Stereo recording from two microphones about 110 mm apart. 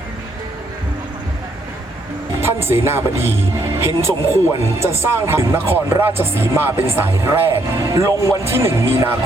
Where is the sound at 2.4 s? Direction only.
20° right (ahead or behind).